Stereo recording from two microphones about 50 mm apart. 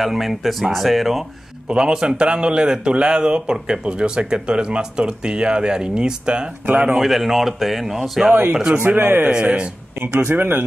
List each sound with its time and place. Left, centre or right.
0.0 s speech: centre
1.7 s speech: centre
7.0 s speech: centre
8.3 s speech: right
9.3 s speech: right
9.9 s speech: right
10.3 s speech: right